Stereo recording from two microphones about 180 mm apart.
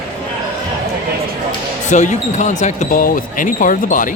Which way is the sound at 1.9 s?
40° left (ahead or behind).